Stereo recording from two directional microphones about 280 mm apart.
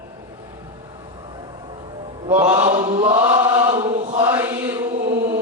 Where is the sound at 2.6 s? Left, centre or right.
Right.